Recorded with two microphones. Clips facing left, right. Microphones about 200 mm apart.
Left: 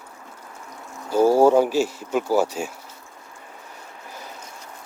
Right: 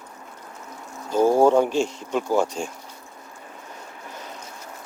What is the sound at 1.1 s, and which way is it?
Speech, 10° left (ahead or behind).